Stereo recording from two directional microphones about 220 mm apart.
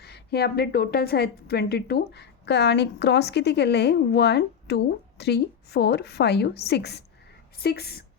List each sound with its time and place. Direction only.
0.0 s a woman's voice: 50° left (ahead or behind)